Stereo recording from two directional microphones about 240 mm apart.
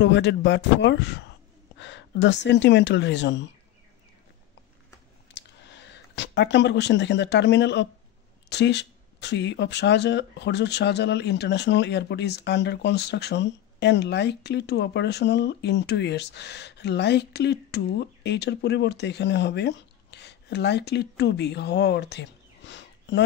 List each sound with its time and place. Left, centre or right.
0.0 s speech: left
5.3 s speech: left